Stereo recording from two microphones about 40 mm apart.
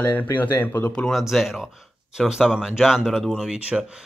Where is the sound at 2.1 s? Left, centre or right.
Centre.